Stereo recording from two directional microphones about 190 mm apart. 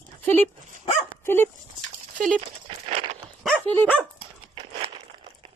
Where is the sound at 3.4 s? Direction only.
5° left (ahead or behind).